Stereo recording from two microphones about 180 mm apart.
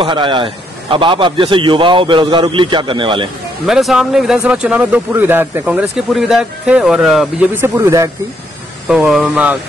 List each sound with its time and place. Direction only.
0.0 s a man's voice: 25° right (ahead or behind)
3.6 s speech: centre (ahead or behind)
7.5 s speech: 15° right (ahead or behind)
8.8 s speech: 5° right (ahead or behind)